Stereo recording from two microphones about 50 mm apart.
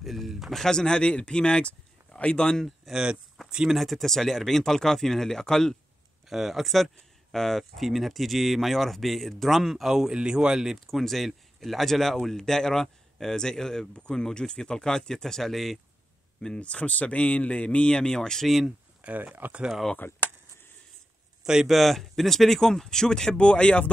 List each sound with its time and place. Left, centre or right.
0.0 s speech: centre
2.9 s speech: centre
3.7 s speech: centre
6.2 s speech: centre
10.9 s speech: centre
16.3 s speech: left
18.9 s speech: right
20.0 s speech: left
21.6 s speech: centre; by 23.9 s left